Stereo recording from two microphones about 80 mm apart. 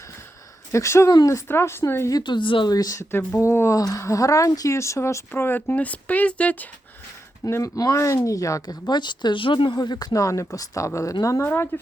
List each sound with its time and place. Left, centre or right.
0.7 s speech: left
1.5 s speech: left
2.2 s speech: left
2.7 s speech: left; by 6.7 s centre
7.4 s speech: left
9.7 s speech: left
10.2 s speech: left
11.4 s speech: left